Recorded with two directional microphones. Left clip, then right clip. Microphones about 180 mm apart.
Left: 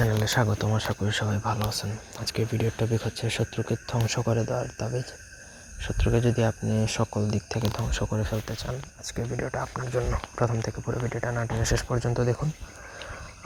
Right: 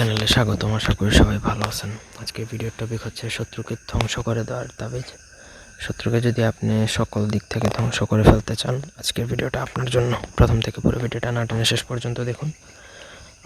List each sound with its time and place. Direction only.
0.3 s speech: 20° right (ahead or behind)
0.9 s speech: 30° right (ahead or behind); by 1.9 s 10° right (ahead or behind)
2.1 s speech: 5° left (ahead or behind)
4.2 s speech: 15° right (ahead or behind)
7.9 s speech: 30° right (ahead or behind); by 10.7 s 50° right (ahead or behind)
10.7 s speech: 35° right (ahead or behind)
11.9 s speech: 25° right (ahead or behind)